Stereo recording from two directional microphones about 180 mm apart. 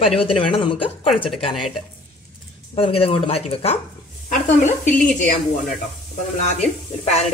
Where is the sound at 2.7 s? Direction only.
30° left (ahead or behind).